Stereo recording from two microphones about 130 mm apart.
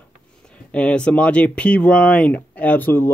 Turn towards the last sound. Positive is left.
turn(degrees=15)  # may be behind; listen again after turning